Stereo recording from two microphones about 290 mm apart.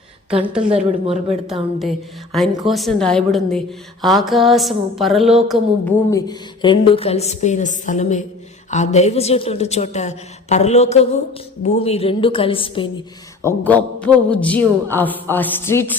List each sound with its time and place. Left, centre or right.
0.4 s a woman's voice: centre
0.7 s speech: centre
2.3 s a woman's voice: centre
13.4 s a woman's voice: centre